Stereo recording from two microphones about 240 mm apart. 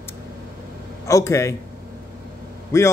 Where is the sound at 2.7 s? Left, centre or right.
Centre.